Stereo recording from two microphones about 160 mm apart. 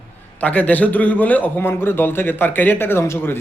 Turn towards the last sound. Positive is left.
turn(degrees=15)  # may be behind; listen again after turning